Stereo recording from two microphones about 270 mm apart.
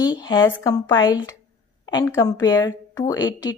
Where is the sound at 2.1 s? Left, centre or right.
Centre.